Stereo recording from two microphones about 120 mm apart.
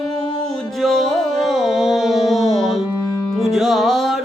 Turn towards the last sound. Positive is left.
turn(degrees=0)  # may be behind; listen again after turning